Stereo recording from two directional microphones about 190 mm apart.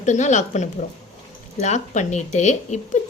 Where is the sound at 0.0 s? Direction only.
40° left (ahead or behind).